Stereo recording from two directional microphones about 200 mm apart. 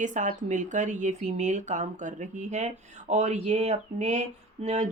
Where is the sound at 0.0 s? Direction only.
40° right (ahead or behind).